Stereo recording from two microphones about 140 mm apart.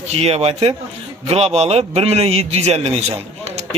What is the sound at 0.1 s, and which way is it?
A man's voice, 45° right (ahead or behind).